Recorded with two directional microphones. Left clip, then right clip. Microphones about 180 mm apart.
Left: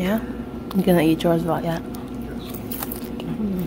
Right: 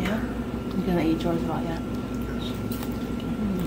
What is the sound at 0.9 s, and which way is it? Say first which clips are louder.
Speech: left 7 dB; 55° left (ahead or behind).